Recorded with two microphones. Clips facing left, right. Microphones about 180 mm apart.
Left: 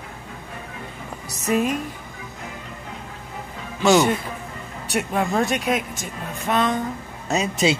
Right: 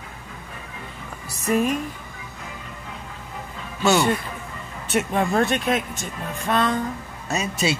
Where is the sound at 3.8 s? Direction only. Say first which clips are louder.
Left 2 dB; 15° left (ahead or behind).